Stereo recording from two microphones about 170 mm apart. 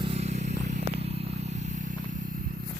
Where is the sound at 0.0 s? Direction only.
35° right (ahead or behind).